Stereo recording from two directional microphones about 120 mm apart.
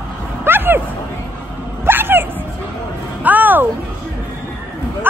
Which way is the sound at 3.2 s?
15° right (ahead or behind).